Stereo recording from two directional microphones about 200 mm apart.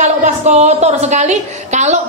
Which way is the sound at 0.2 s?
35° right (ahead or behind).